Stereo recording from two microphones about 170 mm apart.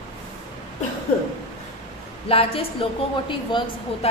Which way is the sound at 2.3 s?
35° left (ahead or behind).